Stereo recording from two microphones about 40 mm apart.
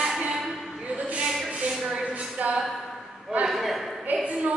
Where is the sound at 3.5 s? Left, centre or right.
Centre.